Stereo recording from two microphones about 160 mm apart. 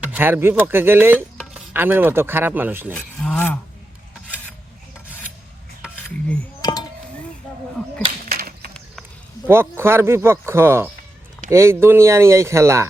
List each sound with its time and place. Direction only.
0.0 s speech: 10° right (ahead or behind)
2.9 s filing: 5° left (ahead or behind)
8.3 s a sound: 65° right (ahead or behind)
9.5 s speech: 15° right (ahead or behind)